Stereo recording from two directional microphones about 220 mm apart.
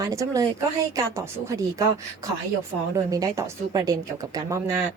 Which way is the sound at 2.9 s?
15° right (ahead or behind).